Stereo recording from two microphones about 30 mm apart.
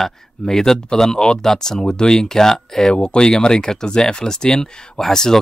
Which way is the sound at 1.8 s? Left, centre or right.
Left.